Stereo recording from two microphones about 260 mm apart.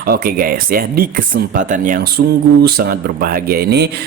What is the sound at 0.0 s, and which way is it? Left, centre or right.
Speech, right.